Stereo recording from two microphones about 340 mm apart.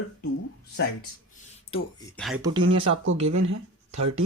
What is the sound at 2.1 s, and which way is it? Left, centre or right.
Speech, centre.